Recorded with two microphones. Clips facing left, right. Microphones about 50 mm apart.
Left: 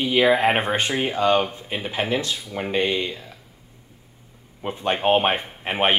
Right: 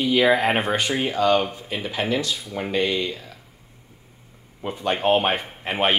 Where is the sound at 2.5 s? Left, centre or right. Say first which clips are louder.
Even; centre.